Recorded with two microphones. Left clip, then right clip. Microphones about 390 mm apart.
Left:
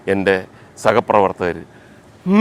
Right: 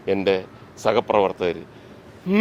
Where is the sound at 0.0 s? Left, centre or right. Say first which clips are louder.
Left 4 dB; left.